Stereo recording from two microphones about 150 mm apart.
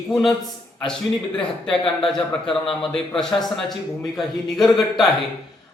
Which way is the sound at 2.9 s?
5° left (ahead or behind).